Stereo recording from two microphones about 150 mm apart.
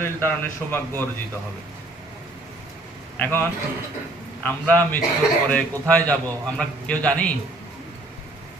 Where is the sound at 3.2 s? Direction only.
15° left (ahead or behind).